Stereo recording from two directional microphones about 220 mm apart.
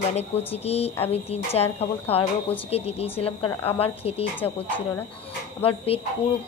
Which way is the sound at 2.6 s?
25° left (ahead or behind).